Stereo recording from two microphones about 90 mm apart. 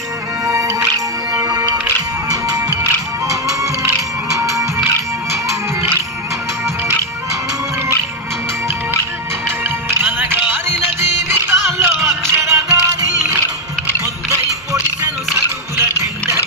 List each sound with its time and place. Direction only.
0.4 s music: 35° right (ahead or behind)
4.4 s music: 35° right (ahead or behind)
9.6 s music: 25° right (ahead or behind)
15.8 s music: 30° right (ahead or behind)